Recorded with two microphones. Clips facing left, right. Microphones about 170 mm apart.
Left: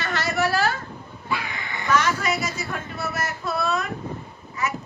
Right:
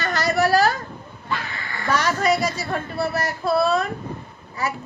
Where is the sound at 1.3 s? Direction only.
15° left (ahead or behind).